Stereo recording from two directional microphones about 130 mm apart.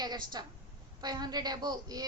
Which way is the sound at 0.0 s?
30° right (ahead or behind).